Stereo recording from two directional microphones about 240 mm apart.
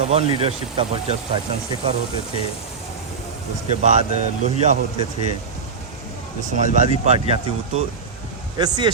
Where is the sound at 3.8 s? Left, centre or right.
Right.